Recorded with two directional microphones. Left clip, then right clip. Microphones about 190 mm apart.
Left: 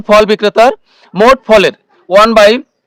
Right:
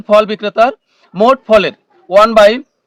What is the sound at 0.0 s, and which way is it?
A man's voice, 45° left (ahead or behind).